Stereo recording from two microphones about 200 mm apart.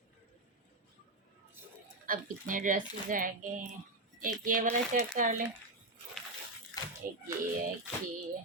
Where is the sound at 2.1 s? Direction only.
40° right (ahead or behind).